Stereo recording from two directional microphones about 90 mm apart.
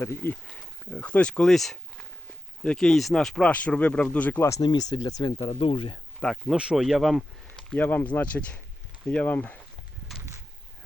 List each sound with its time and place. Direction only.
0.0 s speech: 25° left (ahead or behind)
4.6 s speech: 50° left (ahead or behind)
5.5 s speech: 90° left; by 6.0 s 75° left (ahead or behind)
6.3 s speech: 5° right (ahead or behind)
7.8 s speech: 20° left (ahead or behind)